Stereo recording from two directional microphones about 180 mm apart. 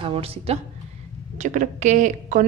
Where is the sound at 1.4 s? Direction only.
45° right (ahead or behind).